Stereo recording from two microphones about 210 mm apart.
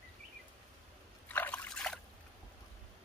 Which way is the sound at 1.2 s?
10° left (ahead or behind).